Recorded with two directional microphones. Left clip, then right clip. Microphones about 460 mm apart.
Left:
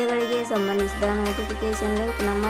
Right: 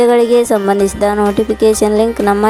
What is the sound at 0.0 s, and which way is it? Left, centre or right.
Speech, centre.